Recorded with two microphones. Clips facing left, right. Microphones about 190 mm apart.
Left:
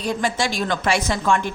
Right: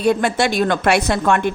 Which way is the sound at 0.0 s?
65° right (ahead or behind).